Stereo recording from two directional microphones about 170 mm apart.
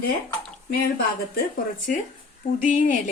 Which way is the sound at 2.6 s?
50° left (ahead or behind).